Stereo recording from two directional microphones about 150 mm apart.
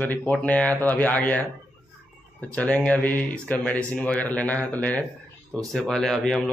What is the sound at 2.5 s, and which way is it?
Speech, 10° left (ahead or behind).